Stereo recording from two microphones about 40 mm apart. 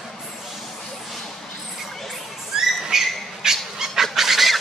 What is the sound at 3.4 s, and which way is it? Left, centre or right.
Cat, centre.